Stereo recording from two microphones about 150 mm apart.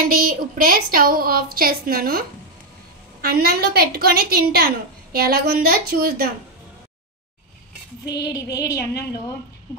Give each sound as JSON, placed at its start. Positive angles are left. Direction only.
{"t": 0.0, "sound": "a woman's voice", "side_deg": -70}
{"t": 3.2, "sound": "a woman's voice", "side_deg": -90}
{"t": 8.1, "sound": "female singing", "side_deg": 25}